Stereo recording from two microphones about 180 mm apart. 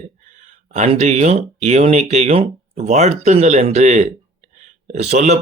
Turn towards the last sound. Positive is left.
turn(degrees=-40)  # may be behind; listen again after turning